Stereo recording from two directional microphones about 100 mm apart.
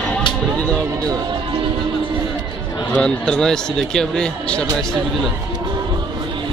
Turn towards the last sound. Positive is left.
turn(degrees=10)  # may be behind; listen again after turning